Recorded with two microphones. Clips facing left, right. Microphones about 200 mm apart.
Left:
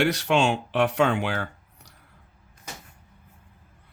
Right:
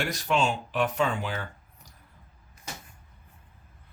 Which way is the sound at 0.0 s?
70° left (ahead or behind).